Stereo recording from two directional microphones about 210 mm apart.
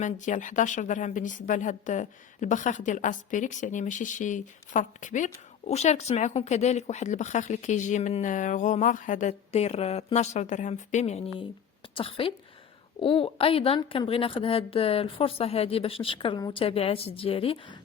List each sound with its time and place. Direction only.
0.0 s a woman's voice: 35° left (ahead or behind)